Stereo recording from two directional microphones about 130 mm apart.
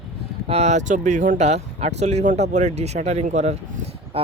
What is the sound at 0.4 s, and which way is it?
Speech, 55° right (ahead or behind).